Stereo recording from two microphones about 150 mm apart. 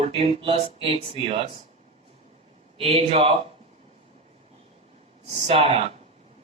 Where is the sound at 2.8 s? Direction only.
40° right (ahead or behind).